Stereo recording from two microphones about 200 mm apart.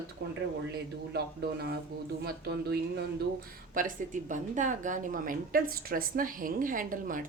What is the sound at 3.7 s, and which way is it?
Speech, 40° right (ahead or behind).